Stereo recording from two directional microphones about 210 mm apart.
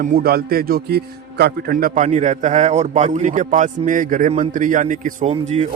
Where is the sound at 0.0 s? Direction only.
45° right (ahead or behind).